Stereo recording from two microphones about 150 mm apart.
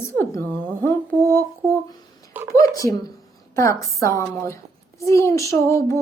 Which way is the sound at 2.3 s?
15° right (ahead or behind).